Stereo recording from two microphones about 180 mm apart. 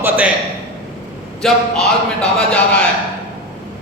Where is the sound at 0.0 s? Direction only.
10° right (ahead or behind).